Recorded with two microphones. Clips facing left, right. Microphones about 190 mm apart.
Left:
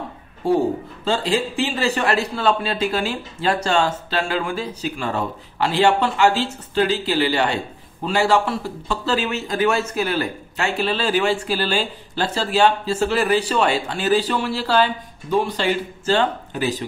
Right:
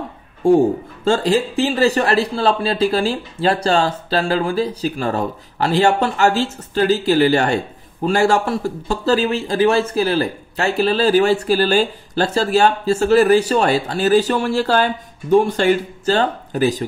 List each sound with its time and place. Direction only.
0.4 s speech: 50° right (ahead or behind)